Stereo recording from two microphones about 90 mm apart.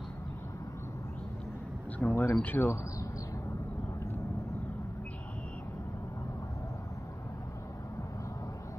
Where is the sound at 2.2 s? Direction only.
20° left (ahead or behind).